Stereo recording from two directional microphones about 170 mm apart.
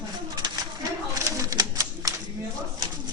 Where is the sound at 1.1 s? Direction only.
20° right (ahead or behind).